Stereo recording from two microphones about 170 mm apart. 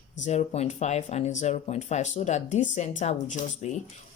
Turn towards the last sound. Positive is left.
turn(degrees=40)  # may be behind; listen again after turning